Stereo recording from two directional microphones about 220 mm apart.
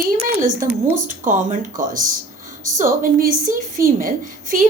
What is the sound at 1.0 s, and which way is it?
A woman's voice, 35° right (ahead or behind).